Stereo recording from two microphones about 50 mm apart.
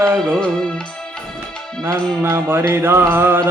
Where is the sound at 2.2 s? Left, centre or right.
Right.